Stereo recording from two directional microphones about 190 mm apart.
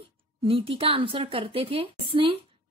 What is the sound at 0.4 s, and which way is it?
A woman's voice, 30° right (ahead or behind).